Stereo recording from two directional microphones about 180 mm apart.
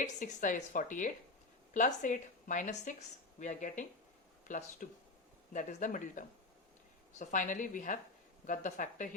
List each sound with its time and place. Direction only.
0.0 s a woman's voice: 45° left (ahead or behind)